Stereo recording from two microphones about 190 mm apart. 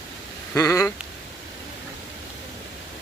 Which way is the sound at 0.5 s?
15° left (ahead or behind).